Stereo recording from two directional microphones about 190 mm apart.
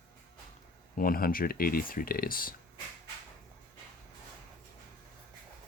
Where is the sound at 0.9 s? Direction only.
50° left (ahead or behind).